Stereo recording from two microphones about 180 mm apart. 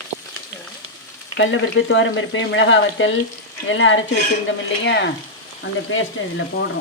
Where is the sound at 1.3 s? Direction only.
90° left.